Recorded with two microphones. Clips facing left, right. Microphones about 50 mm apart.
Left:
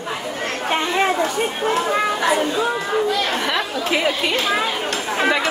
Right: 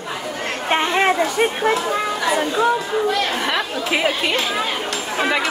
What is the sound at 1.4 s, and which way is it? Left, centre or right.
Speech, right.